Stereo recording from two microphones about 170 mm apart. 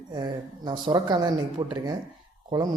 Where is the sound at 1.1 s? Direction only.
25° right (ahead or behind).